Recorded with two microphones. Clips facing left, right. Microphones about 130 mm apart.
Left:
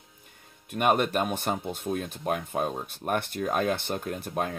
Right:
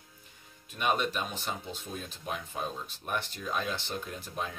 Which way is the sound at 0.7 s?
55° left (ahead or behind).